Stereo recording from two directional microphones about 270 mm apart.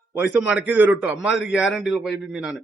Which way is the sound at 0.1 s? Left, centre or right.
Centre.